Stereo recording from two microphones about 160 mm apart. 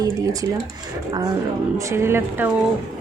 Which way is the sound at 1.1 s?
25° right (ahead or behind).